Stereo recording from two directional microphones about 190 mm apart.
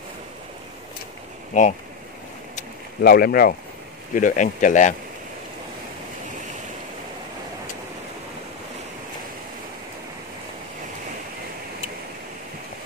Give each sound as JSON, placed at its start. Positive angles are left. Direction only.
{"t": 1.5, "sound": "speech", "side_deg": 40}
{"t": 3.0, "sound": "speech", "side_deg": 55}
{"t": 4.1, "sound": "speech", "side_deg": 40}